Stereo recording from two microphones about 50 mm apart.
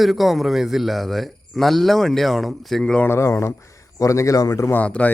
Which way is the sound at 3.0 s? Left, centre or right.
Left.